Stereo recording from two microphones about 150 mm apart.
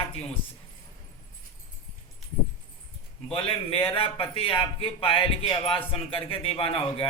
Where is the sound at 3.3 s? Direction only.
35° left (ahead or behind).